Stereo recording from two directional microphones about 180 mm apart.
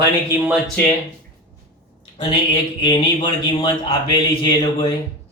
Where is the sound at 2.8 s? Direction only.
25° left (ahead or behind).